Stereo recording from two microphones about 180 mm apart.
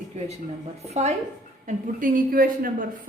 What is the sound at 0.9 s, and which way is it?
Speech, 35° right (ahead or behind).